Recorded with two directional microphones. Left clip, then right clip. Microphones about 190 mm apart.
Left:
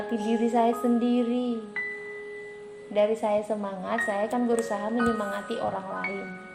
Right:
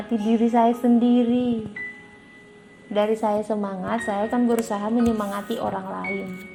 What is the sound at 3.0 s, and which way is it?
A woman's voice, 25° right (ahead or behind).